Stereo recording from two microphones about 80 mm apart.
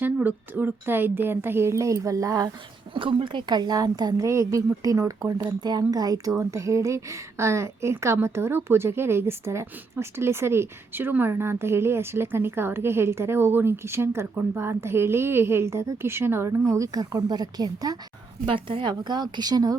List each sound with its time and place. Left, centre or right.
0.0 s a woman's voice: right
2.9 s a woman's voice: right
18.4 s a woman's voice: right